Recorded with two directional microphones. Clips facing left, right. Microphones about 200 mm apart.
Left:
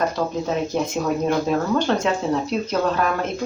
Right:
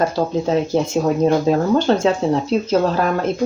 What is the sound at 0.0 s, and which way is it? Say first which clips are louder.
Speech: right 4 dB; 30° right (ahead or behind).